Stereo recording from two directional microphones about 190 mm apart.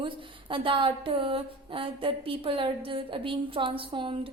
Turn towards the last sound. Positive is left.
turn(degrees=-25)  # may be behind; listen again after turning